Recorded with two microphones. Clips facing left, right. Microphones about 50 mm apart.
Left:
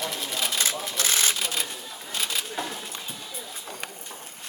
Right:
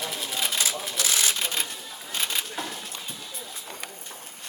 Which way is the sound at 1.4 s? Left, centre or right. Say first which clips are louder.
Even; centre.